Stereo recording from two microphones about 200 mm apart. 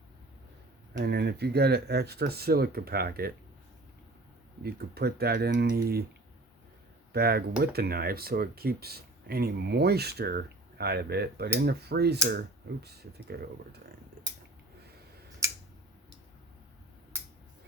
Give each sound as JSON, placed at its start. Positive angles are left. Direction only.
{"t": 0.9, "sound": "speech", "side_deg": -55}
{"t": 4.6, "sound": "speech", "side_deg": -50}
{"t": 7.1, "sound": "speech", "side_deg": -50}